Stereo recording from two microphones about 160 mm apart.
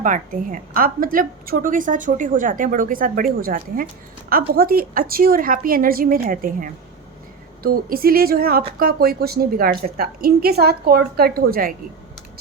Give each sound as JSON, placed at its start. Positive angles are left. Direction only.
{"t": 0.0, "sound": "a woman's voice", "side_deg": -55}